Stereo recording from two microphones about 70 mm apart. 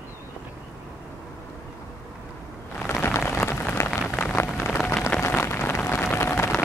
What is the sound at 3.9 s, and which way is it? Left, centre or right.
Rain on surface, centre.